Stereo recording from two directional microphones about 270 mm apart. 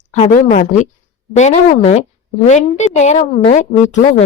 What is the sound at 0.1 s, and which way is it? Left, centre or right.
A woman's voice, left.